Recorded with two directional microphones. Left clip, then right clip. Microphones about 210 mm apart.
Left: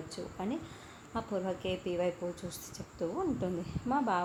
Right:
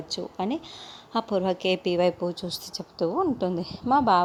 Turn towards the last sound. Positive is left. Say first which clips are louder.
# right 11 dB
turn(degrees=-40)  # may be behind; listen again after turning